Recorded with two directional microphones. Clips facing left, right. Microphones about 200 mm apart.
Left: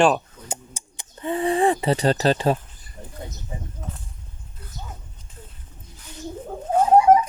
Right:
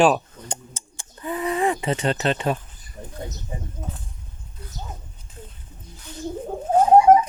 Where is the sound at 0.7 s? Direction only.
20° left (ahead or behind).